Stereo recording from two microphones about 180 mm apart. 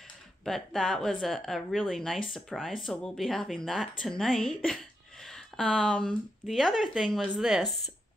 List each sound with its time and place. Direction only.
0.5 s speech: centre (ahead or behind)